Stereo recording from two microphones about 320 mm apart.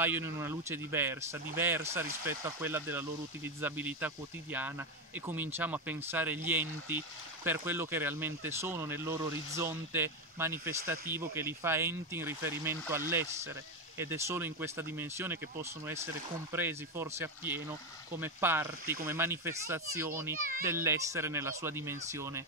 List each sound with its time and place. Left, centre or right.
0.0 s speech: centre
20.3 s a child's voice: right
20.6 s speech: centre